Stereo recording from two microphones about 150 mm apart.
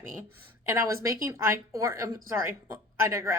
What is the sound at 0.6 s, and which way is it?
A woman's voice, 20° right (ahead or behind).